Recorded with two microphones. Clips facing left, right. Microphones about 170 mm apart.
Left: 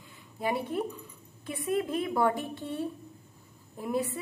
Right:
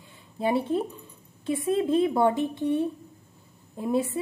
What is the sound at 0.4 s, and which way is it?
A woman's voice, 30° right (ahead or behind).